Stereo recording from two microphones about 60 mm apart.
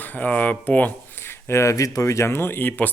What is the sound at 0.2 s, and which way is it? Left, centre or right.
Speech, left.